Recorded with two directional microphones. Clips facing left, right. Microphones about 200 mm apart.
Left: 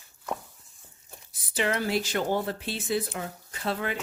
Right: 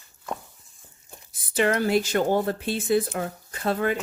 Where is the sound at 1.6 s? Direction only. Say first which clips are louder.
Right 5 dB; 50° right (ahead or behind).